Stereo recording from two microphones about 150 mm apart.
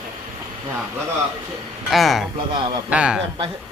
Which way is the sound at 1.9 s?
Centre (ahead or behind).